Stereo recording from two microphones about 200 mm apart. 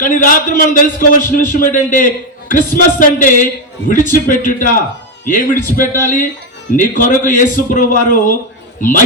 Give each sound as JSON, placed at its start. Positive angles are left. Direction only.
{"t": 0.0, "sound": "a man's voice", "side_deg": 40}